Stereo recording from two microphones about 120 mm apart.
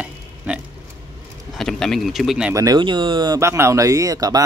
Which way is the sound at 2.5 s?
35° right (ahead or behind).